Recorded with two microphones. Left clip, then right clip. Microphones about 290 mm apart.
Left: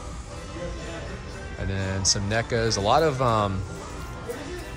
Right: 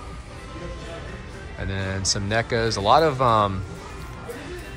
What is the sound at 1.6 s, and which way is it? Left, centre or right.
Speech, centre.